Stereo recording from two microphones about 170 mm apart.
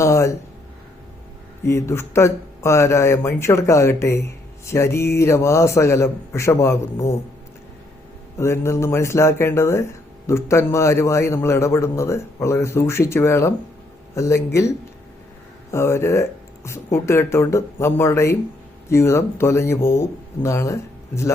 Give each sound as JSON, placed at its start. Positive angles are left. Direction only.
{"t": 0.0, "sound": "a sound", "side_deg": 15}
{"t": 1.6, "sound": "speech", "side_deg": 15}
{"t": 8.4, "sound": "speech", "side_deg": 15}